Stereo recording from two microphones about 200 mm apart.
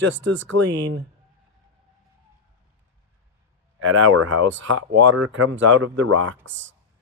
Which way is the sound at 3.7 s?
80° right.